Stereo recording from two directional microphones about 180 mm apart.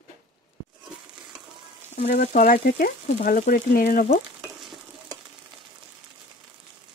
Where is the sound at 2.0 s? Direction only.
40° left (ahead or behind).